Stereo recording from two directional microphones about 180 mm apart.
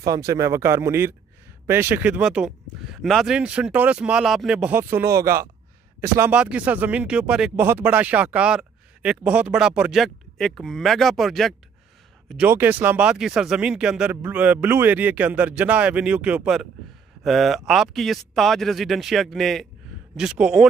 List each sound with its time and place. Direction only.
0.0 s speech: 20° right (ahead or behind)